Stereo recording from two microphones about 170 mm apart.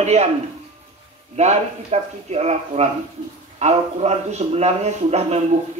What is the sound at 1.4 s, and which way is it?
A man's voice, 40° right (ahead or behind).